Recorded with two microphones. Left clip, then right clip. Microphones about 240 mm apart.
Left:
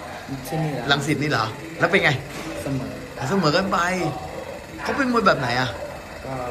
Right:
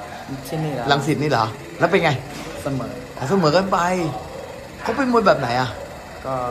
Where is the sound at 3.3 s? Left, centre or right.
Centre.